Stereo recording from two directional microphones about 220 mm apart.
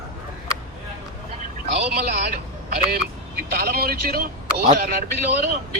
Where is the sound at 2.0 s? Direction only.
40° right (ahead or behind).